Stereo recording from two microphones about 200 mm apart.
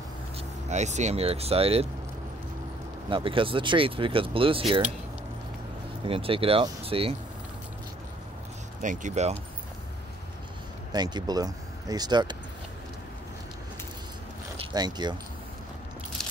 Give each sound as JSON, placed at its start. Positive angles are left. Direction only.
{"t": 0.7, "sound": "speech", "side_deg": -35}
{"t": 3.1, "sound": "speech", "side_deg": -25}
{"t": 6.0, "sound": "speech", "side_deg": -30}
{"t": 8.8, "sound": "speech", "side_deg": -35}
{"t": 10.9, "sound": "speech", "side_deg": -20}
{"t": 14.6, "sound": "speech", "side_deg": -20}